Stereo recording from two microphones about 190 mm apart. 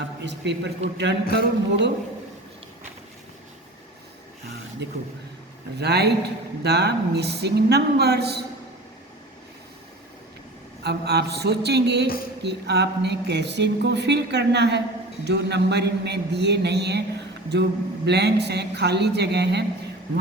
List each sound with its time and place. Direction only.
0.3 s speech: 65° right (ahead or behind)
4.8 s speech: 60° right (ahead or behind)
10.8 s speech: 60° right (ahead or behind)